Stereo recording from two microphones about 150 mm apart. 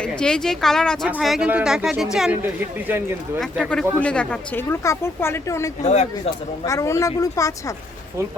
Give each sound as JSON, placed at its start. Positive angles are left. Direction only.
{"t": 0.0, "sound": "speech", "side_deg": 5}
{"t": 2.4, "sound": "speech", "side_deg": -15}
{"t": 3.4, "sound": "speech", "side_deg": 5}
{"t": 5.8, "sound": "speech", "side_deg": 50}
{"t": 6.7, "sound": "speech", "side_deg": 20}